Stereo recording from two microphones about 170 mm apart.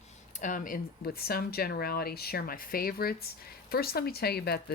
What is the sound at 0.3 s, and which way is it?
Speech, 50° left (ahead or behind).